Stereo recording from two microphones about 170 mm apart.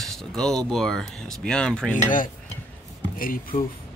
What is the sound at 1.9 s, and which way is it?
Cutlery, 50° left (ahead or behind).